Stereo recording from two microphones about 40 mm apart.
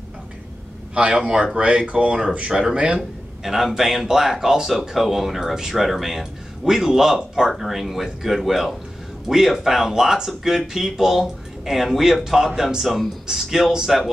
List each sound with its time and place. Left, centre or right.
0.9 s speech: right
2.5 s speech: centre
3.0 s speech: centre